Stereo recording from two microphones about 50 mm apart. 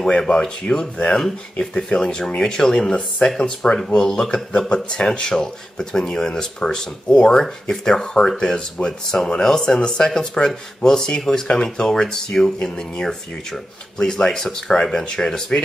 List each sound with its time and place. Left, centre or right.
0.3 s speech: centre
4.3 s a man's voice: centre
12.5 s a man's voice: left